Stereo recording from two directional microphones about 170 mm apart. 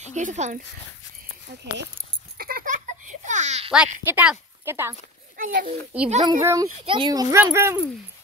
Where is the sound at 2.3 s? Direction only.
60° right (ahead or behind); by 3.7 s 40° right (ahead or behind).